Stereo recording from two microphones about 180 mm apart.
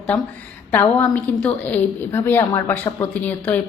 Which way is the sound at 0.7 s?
10° left (ahead or behind).